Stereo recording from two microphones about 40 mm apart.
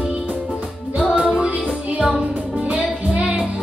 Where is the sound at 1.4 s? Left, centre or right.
Right.